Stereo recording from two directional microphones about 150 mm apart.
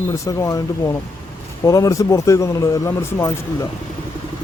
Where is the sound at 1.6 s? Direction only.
20° left (ahead or behind).